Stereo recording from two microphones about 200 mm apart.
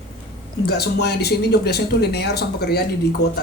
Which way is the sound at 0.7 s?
55° left (ahead or behind).